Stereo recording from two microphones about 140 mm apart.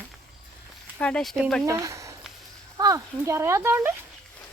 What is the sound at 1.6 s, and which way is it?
Speech, 20° right (ahead or behind).